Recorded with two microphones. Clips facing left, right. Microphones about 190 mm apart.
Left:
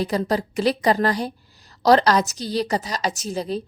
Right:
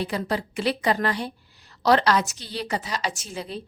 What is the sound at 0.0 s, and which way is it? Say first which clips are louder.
A woman's voice: left 5 dB; 40° left (ahead or behind).